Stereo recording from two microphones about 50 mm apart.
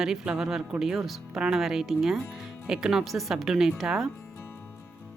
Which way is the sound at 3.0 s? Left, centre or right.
Centre.